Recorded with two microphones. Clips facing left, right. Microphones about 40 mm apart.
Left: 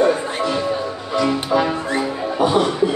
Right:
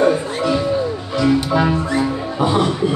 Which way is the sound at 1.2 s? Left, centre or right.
Centre.